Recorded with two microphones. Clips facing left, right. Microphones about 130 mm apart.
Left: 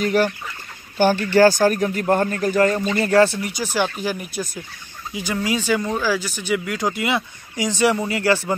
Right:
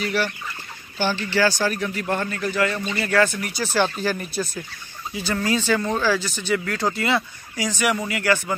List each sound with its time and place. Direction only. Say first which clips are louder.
0.0 s a man's voice: left 5 dB; 45° left (ahead or behind)